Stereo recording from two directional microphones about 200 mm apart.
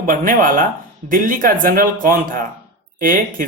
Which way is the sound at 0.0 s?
45° right (ahead or behind).